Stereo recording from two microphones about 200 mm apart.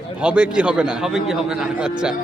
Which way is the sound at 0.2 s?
5° right (ahead or behind).